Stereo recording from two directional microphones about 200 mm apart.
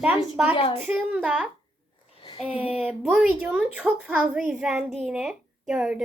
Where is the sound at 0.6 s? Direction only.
25° left (ahead or behind).